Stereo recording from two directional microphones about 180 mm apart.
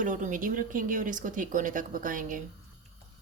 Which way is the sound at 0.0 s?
45° right (ahead or behind).